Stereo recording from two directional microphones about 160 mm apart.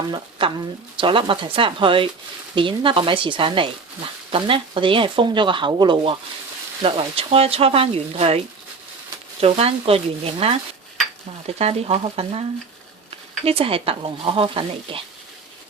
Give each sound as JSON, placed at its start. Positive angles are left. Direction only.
{"t": 0.1, "sound": "speech", "side_deg": -30}
{"t": 9.4, "sound": "speech", "side_deg": -40}